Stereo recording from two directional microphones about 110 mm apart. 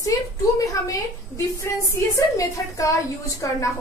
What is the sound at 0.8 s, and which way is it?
A woman's voice, 25° left (ahead or behind).